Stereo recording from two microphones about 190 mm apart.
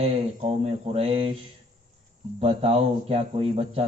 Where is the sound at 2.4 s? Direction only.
30° right (ahead or behind).